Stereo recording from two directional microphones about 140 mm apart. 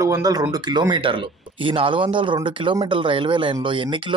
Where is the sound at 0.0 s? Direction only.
25° right (ahead or behind).